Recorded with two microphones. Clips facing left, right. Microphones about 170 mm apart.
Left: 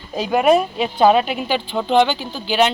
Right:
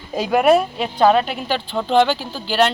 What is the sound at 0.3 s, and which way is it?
Speech, 5° right (ahead or behind).